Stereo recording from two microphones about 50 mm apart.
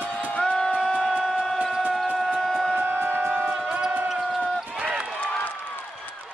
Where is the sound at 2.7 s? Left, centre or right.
Right.